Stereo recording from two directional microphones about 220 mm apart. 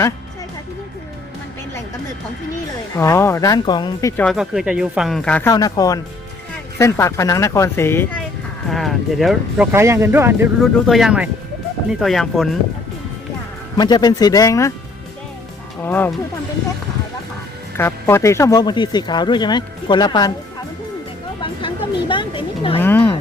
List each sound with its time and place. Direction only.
3.0 s a woman's voice: 10° left (ahead or behind)
4.2 s speech: centre (ahead or behind)
5.5 s a woman's voice: 15° left (ahead or behind); by 10.5 s 10° right (ahead or behind)
10.6 s speech: centre (ahead or behind)
13.7 s a woman's voice: 20° left (ahead or behind)
15.8 s a woman's voice: 10° left (ahead or behind)
17.7 s speech: 10° left (ahead or behind)
22.1 s a sound: 20° left (ahead or behind)
22.8 s a woman's voice: 10° left (ahead or behind)